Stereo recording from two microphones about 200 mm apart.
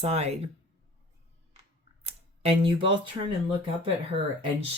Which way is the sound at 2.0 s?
30° right (ahead or behind).